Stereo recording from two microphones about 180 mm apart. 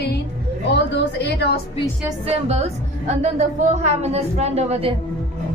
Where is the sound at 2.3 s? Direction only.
35° right (ahead or behind).